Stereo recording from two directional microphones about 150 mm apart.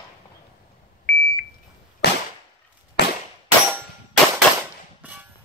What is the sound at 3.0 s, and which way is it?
Clang, 90° left.